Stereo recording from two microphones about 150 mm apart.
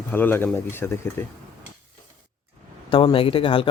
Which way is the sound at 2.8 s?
35° left (ahead or behind).